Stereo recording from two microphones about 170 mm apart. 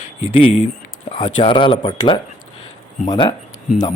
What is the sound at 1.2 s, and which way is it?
Speech, 30° left (ahead or behind).